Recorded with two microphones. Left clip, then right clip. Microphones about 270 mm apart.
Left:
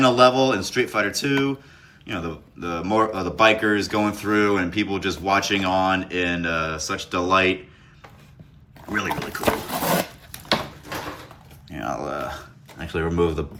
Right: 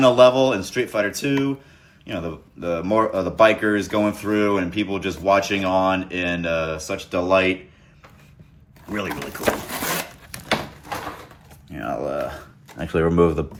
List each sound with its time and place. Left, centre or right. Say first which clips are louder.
0.0 s speech: right 2 dB; centre
8.9 s speech: left 2 dB; centre
11.7 s speech: right 2 dB; centre
12.8 s speech: right 5 dB; centre